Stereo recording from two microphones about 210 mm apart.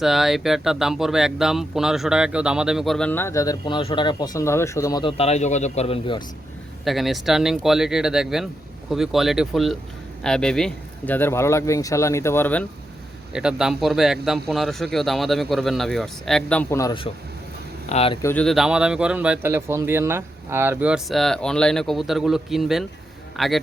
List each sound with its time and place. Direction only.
0.0 s speech: centre (ahead or behind); by 6.2 s 25° left (ahead or behind)
6.8 s speech: centre (ahead or behind)
13.3 s speech: 5° right (ahead or behind); by 18.2 s 30° left (ahead or behind)
18.2 s speech: 10° left (ahead or behind)